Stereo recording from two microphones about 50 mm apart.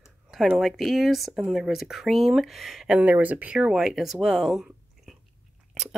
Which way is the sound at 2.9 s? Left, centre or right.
Right.